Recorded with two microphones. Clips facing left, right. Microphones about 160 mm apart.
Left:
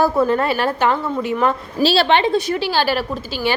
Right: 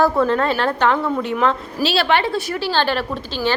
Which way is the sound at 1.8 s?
25° left (ahead or behind).